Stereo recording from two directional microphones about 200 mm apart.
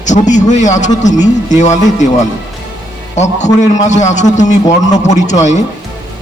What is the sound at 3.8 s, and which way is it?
A man's voice, 35° left (ahead or behind).